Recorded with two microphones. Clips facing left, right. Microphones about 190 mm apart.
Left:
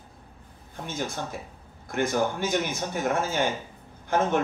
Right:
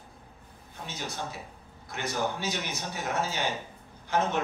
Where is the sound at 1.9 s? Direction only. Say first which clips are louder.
Left 6 dB; 50° left (ahead or behind).